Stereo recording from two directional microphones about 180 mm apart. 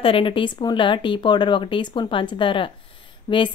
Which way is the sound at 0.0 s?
30° left (ahead or behind).